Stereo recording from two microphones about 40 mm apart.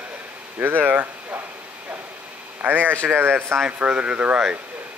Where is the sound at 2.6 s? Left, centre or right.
Right.